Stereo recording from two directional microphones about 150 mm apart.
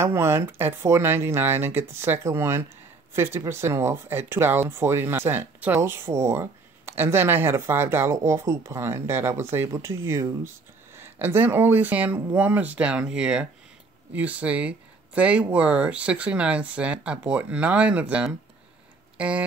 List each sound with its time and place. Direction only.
0.0 s speech: 15° right (ahead or behind)